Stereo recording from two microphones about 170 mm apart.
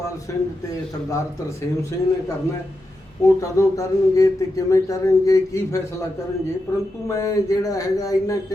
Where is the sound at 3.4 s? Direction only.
20° left (ahead or behind).